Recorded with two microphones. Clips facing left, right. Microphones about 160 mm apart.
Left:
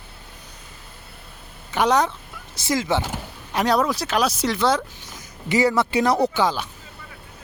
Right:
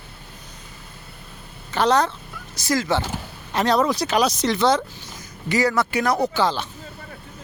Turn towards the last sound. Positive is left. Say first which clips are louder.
# even
turn(degrees=10)  # may be behind; listen again after turning